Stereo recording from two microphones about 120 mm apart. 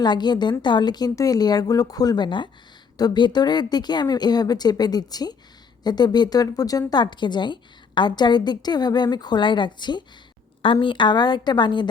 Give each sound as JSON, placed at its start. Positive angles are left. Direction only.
{"t": 0.0, "sound": "speech", "side_deg": 35}